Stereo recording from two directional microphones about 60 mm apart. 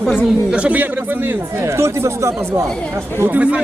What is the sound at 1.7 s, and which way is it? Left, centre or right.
Speech, right.